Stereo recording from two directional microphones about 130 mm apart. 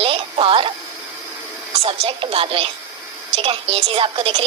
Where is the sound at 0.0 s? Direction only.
45° right (ahead or behind).